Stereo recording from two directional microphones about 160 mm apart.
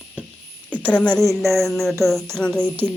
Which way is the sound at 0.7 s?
10° left (ahead or behind).